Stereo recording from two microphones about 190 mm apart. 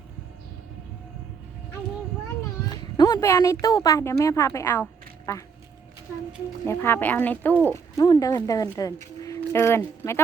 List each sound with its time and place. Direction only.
2.6 s a woman's voice: 20° left (ahead or behind)
6.7 s speech: 10° left (ahead or behind)